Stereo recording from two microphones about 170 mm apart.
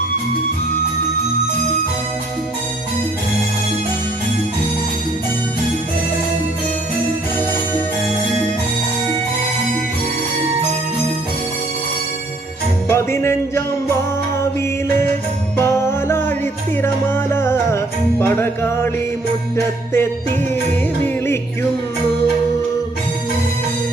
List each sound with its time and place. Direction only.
12.9 s music: 15° left (ahead or behind)
15.5 s music: 15° left (ahead or behind)